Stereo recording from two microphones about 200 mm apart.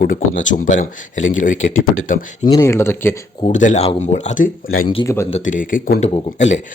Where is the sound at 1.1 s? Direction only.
75° left (ahead or behind).